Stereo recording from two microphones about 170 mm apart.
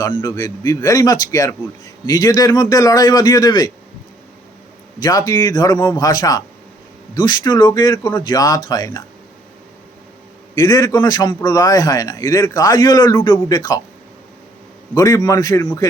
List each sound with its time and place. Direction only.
0.2 s a man's voice: 20° left (ahead or behind)
5.0 s a man's voice: 20° left (ahead or behind)
10.5 s a man's voice: 20° left (ahead or behind)
14.9 s a man's voice: 20° left (ahead or behind)